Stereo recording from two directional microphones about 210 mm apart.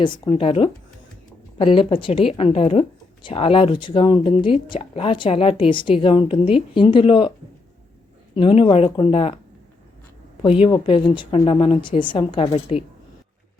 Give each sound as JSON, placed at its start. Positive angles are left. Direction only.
{"t": 0.3, "sound": "speech", "side_deg": 25}
{"t": 8.4, "sound": "speech", "side_deg": 25}
{"t": 10.6, "sound": "speech", "side_deg": 25}